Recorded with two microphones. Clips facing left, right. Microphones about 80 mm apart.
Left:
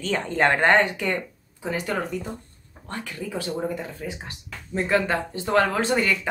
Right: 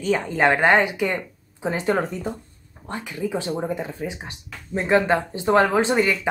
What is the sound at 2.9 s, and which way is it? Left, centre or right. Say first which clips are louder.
Speech: right 5 dB; centre.